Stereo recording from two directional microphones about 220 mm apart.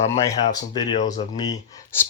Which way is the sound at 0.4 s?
20° left (ahead or behind).